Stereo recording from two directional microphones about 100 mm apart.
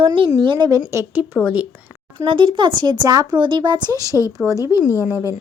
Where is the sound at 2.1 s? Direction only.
55° right (ahead or behind); by 4.2 s 40° right (ahead or behind).